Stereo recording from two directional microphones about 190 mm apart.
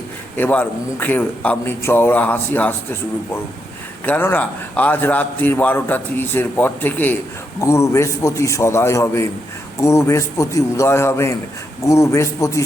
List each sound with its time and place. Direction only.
0.3 s a man's voice: 10° left (ahead or behind)
4.0 s a man's voice: 10° left (ahead or behind)